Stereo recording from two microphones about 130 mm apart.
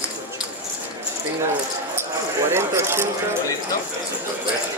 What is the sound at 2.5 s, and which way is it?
Speech, 20° right (ahead or behind).